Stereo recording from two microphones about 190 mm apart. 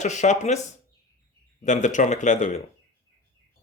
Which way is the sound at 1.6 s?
40° left (ahead or behind).